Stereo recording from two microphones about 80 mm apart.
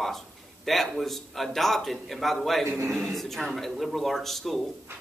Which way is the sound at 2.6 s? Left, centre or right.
Right.